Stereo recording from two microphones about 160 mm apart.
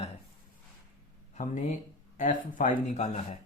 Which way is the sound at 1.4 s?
55° left (ahead or behind).